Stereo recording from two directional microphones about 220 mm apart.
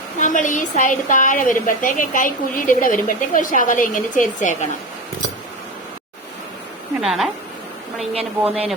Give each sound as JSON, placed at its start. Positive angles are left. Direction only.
{"t": 0.2, "sound": "a woman's voice", "side_deg": 35}
{"t": 7.0, "sound": "speech", "side_deg": 0}
{"t": 8.1, "sound": "speech", "side_deg": -25}